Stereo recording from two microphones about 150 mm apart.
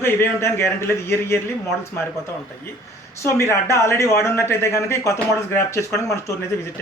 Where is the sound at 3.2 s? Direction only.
20° left (ahead or behind).